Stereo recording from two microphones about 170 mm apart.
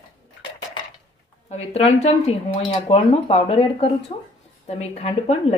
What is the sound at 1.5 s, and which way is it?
A woman's voice, 35° left (ahead or behind).